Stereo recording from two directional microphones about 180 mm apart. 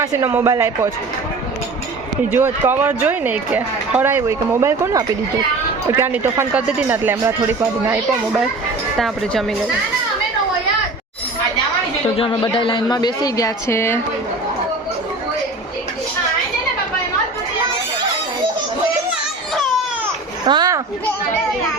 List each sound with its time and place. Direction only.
0.0 s speech: 20° right (ahead or behind)
2.3 s speech: 10° right (ahead or behind)
9.0 s speech: centre (ahead or behind)
12.1 s a man's voice: 30° left (ahead or behind); by 14.0 s 15° left (ahead or behind)
20.5 s a sound: 20° right (ahead or behind)